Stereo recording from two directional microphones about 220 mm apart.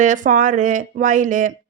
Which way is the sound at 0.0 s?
35° right (ahead or behind).